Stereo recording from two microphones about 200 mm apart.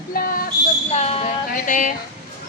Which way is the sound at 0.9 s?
30° left (ahead or behind).